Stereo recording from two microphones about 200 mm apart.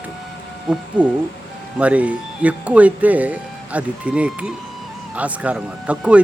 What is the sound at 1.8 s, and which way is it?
Speech, 5° right (ahead or behind).